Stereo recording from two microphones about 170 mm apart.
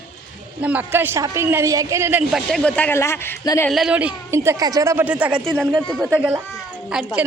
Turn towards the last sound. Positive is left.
turn(degrees=-5)  # may be behind; listen again after turning